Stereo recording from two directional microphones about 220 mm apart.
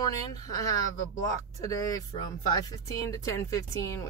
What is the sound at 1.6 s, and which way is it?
Speech, 15° left (ahead or behind).